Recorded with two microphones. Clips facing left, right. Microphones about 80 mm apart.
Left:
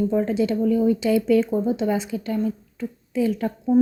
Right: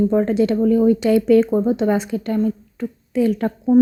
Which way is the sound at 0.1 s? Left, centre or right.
Right.